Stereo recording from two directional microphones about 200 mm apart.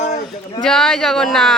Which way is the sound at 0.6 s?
Centre (ahead or behind).